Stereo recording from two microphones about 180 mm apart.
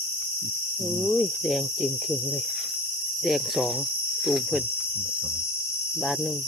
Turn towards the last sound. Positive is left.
turn(degrees=0)  # may be behind; listen again after turning